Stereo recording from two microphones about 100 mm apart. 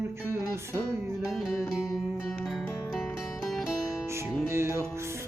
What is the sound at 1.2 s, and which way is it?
Music, 5° right (ahead or behind).